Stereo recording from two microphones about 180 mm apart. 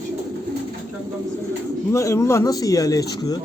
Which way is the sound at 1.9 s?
15° left (ahead or behind).